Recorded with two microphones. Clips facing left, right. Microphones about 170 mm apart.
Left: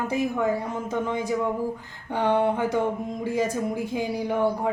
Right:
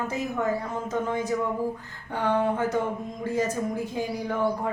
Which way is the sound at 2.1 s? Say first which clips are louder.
Left 2 dB; 20° left (ahead or behind).